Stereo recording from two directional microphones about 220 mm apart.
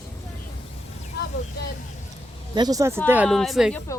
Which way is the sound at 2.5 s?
15° right (ahead or behind).